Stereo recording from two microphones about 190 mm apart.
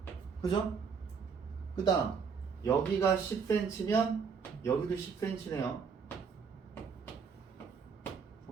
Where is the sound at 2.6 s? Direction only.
15° left (ahead or behind).